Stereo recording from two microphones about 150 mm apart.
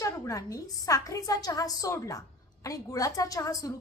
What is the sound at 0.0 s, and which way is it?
A woman's voice, 20° left (ahead or behind).